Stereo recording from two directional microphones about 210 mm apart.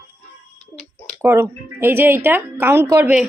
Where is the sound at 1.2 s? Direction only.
15° right (ahead or behind).